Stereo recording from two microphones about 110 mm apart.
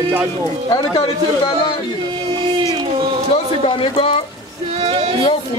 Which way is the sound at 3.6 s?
55° left (ahead or behind).